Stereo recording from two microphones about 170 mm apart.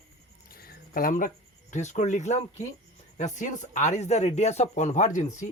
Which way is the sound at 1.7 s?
45° left (ahead or behind).